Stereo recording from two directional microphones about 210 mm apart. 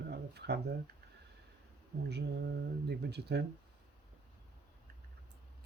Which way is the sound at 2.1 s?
55° right (ahead or behind).